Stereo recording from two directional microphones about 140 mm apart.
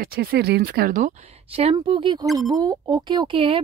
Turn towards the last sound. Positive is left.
turn(degrees=-40)  # may be behind; listen again after turning